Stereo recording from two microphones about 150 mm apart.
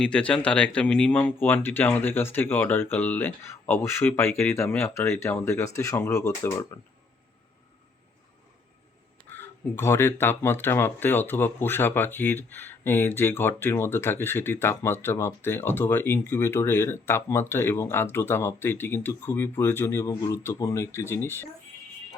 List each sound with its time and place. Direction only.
0.0 s speech: 5° left (ahead or behind)
9.3 s speech: 15° left (ahead or behind)